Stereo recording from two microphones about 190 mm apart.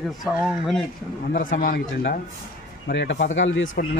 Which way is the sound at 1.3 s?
50° left (ahead or behind).